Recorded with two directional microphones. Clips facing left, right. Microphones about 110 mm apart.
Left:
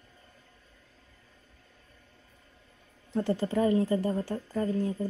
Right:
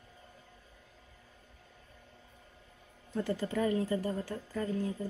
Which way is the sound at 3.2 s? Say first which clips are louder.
Left 5 dB; 30° left (ahead or behind).